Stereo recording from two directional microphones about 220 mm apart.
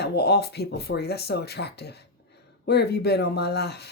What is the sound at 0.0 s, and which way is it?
Speech, 45° left (ahead or behind).